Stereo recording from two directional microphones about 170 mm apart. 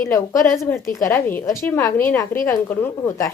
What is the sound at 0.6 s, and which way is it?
Speech, 15° left (ahead or behind).